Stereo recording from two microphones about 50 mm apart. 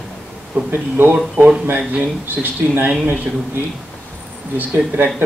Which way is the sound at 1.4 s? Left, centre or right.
Right.